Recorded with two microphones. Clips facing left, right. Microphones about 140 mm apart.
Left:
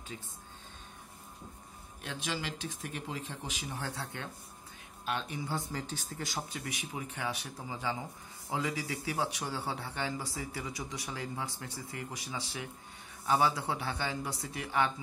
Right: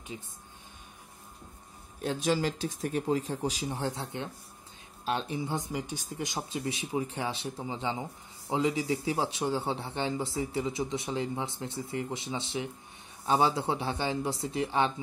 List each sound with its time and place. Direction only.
2.0 s speech: 40° right (ahead or behind)
5.6 s speech: 15° right (ahead or behind)